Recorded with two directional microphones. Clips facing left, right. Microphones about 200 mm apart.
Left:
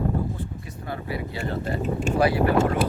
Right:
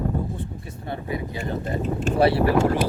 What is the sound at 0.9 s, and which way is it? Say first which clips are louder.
Speech: right 2 dB; 20° right (ahead or behind).